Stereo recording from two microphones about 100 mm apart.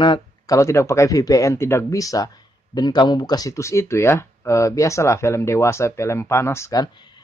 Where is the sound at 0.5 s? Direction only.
30° left (ahead or behind).